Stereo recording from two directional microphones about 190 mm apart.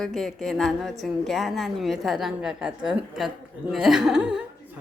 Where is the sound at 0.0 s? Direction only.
Centre (ahead or behind).